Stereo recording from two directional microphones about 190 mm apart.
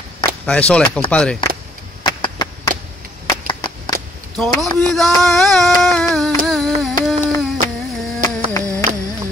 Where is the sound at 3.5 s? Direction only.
20° left (ahead or behind).